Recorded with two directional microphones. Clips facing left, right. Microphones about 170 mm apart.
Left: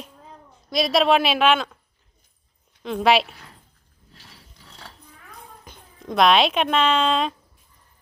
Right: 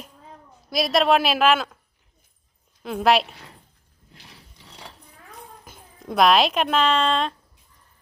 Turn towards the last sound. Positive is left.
turn(degrees=0)  # may be behind; listen again after turning